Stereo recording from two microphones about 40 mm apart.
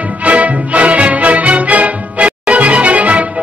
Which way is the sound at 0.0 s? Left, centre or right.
Right.